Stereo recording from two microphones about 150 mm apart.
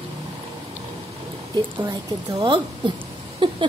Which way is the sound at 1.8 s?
25° right (ahead or behind).